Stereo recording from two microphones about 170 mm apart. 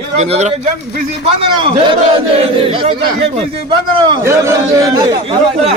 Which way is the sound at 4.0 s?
20° right (ahead or behind).